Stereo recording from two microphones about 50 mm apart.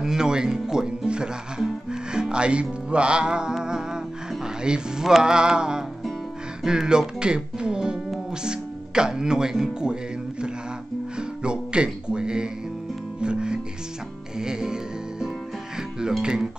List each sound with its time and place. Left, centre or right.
0.0 s speech: centre
11.1 s music: centre